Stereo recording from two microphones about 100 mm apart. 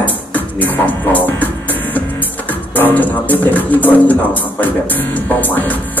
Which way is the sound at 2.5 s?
20° left (ahead or behind).